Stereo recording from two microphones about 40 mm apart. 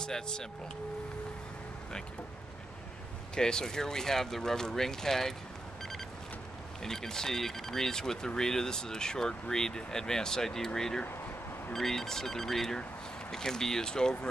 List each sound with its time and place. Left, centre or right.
0.0 s speech: centre
3.3 s speech: centre
6.8 s speech: centre